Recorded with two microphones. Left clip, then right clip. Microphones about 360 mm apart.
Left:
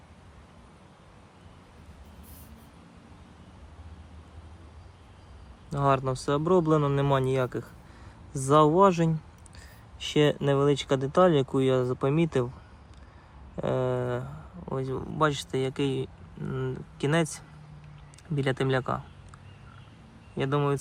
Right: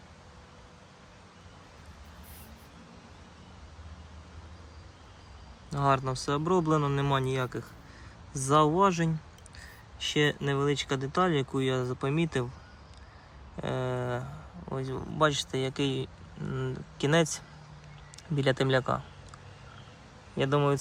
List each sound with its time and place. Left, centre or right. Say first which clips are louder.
5.7 s speech: left 2 dB; centre
13.6 s speech: left 5 dB; centre
20.3 s speech: right 1 dB; centre